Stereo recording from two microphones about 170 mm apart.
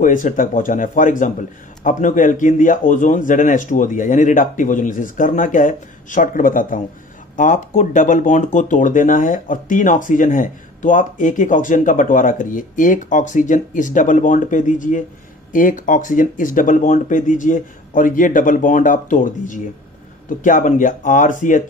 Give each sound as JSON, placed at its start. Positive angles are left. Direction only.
{"t": 0.0, "sound": "speech", "side_deg": 50}